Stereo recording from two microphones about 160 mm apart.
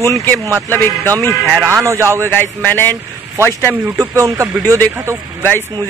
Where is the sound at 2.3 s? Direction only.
10° left (ahead or behind).